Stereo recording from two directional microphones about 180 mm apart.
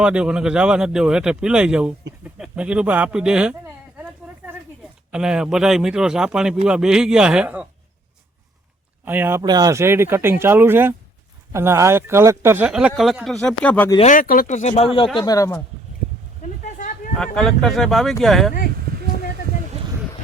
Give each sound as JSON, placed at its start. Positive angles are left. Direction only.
{"t": 0.0, "sound": "speech", "side_deg": -5}
{"t": 5.1, "sound": "speech", "side_deg": -5}
{"t": 9.0, "sound": "speech", "side_deg": -10}
{"t": 9.4, "sound": "speech", "side_deg": -20}
{"t": 14.0, "sound": "speech", "side_deg": 45}
{"t": 15.2, "sound": "speech", "side_deg": 20}
{"t": 16.4, "sound": "a sound", "side_deg": 45}
{"t": 17.3, "sound": "speech", "side_deg": 0}